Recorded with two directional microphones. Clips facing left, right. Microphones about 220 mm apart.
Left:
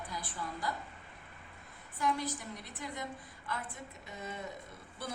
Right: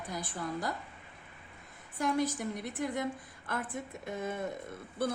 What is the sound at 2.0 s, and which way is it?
A woman's voice, 50° right (ahead or behind).